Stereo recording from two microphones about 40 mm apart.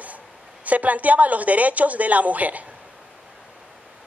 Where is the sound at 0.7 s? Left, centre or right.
Right.